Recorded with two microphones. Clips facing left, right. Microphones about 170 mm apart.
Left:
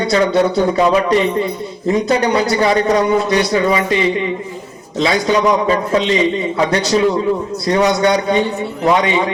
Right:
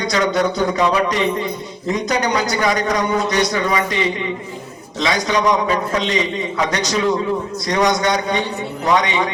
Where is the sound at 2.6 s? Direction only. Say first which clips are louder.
Left 6 dB; 30° left (ahead or behind).